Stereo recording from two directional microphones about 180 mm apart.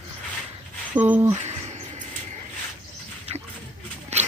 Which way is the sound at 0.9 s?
10° right (ahead or behind).